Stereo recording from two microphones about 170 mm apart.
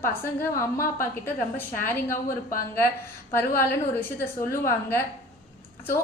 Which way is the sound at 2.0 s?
55° left (ahead or behind).